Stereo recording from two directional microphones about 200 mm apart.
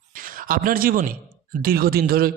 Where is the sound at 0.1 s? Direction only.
45° right (ahead or behind).